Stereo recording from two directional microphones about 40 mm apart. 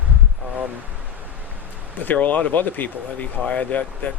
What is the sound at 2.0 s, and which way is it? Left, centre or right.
Speech, left.